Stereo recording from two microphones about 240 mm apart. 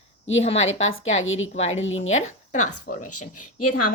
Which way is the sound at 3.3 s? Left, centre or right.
Left.